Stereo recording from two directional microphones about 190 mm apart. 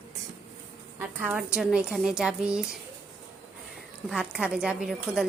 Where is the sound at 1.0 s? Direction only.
10° right (ahead or behind).